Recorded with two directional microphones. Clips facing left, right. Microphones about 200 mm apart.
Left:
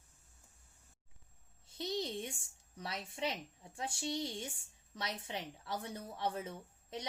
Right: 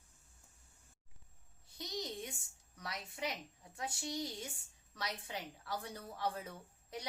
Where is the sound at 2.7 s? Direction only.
25° left (ahead or behind).